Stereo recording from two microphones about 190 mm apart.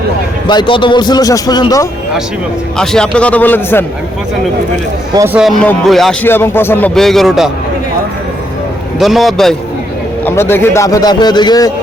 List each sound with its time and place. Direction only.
0.4 s a man's voice: 25° left (ahead or behind)
2.7 s a man's voice: 5° left (ahead or behind)
5.1 s speech: 15° right (ahead or behind)
5.4 s a man's voice: centre (ahead or behind)
9.0 s speech: centre (ahead or behind)
10.2 s a man's voice: 10° left (ahead or behind)